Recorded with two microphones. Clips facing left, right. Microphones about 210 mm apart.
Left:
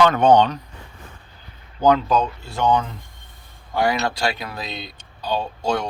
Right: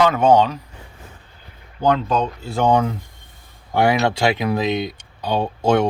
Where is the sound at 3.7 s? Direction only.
25° right (ahead or behind).